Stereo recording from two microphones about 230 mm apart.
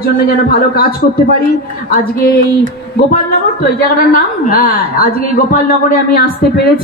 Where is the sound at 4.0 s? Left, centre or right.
Left.